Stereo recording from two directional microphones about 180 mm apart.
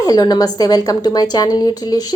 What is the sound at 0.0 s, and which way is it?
A woman's voice, 20° left (ahead or behind).